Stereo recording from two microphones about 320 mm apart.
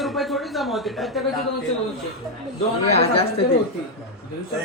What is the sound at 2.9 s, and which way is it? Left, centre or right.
Speech, centre.